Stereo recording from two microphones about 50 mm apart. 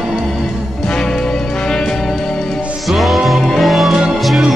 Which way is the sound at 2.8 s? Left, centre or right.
Centre.